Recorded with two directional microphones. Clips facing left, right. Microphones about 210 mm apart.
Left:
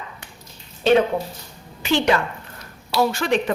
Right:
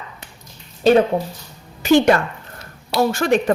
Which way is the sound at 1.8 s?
45° right (ahead or behind).